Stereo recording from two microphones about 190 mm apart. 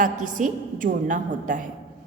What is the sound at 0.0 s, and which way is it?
A woman's voice, 45° right (ahead or behind).